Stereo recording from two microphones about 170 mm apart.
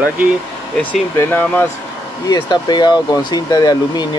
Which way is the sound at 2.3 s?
25° left (ahead or behind).